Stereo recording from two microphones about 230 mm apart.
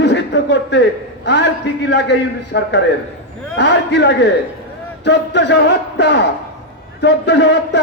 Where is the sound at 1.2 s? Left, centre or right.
Left.